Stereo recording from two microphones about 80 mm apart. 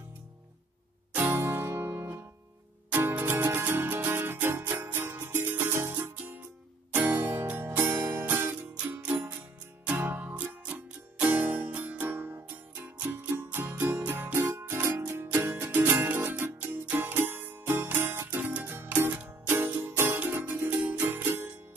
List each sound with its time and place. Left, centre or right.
1.1 s music: right
9.9 s music: right